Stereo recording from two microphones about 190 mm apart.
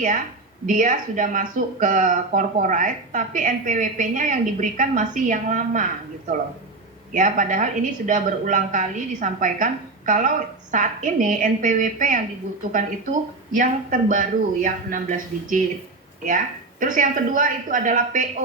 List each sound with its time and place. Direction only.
0.6 s speech: 45° right (ahead or behind)
16.8 s speech: 45° right (ahead or behind)